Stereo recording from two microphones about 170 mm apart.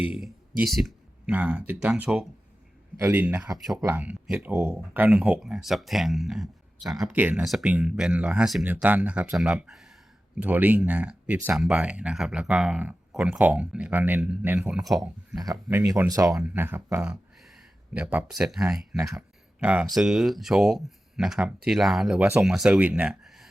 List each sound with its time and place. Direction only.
0.0 s speech: 5° right (ahead or behind)
15.4 s speech: 20° right (ahead or behind); by 23.5 s centre (ahead or behind)